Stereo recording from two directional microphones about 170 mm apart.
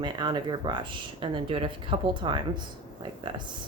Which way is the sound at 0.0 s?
25° right (ahead or behind).